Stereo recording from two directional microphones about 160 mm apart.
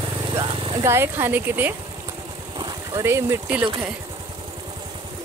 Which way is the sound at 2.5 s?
30° right (ahead or behind).